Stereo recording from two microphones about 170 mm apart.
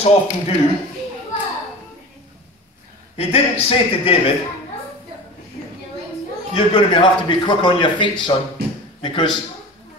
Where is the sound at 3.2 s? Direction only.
35° left (ahead or behind).